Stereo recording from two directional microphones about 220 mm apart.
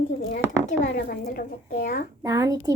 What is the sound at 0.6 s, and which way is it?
A woman's voice, 40° left (ahead or behind).